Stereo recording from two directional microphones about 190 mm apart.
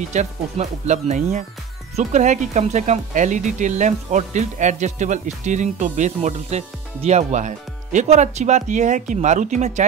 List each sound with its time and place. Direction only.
0.1 s speech: 40° right (ahead or behind)